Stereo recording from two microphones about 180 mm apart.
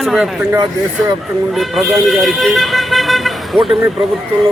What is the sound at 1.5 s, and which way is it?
Speech, centre (ahead or behind).